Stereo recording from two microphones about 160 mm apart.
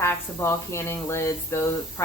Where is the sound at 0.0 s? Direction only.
15° left (ahead or behind).